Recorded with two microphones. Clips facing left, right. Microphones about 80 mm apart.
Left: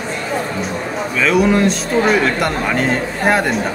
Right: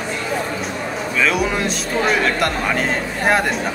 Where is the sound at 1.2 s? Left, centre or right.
Centre.